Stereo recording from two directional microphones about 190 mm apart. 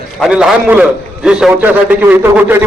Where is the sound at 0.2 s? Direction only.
5° right (ahead or behind).